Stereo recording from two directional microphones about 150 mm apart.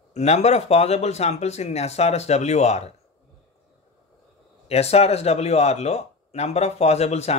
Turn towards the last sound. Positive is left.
turn(degrees=45)  # may be behind; listen again after turning